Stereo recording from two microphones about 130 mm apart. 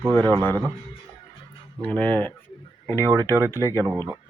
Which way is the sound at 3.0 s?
25° right (ahead or behind).